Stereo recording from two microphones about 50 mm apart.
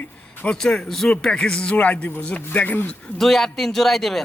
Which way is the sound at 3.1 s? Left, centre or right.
Centre.